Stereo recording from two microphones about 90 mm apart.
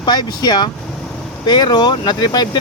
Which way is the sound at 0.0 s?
50° left (ahead or behind).